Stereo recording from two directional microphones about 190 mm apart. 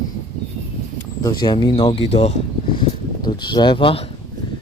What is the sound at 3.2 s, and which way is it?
Speech, 25° left (ahead or behind).